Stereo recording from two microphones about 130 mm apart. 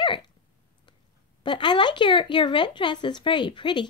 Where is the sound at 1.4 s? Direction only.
35° left (ahead or behind).